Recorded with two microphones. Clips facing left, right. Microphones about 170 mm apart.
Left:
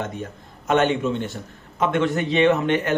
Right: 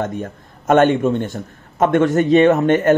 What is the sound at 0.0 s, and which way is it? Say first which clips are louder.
A man's voice: right 6 dB; 50° right (ahead or behind).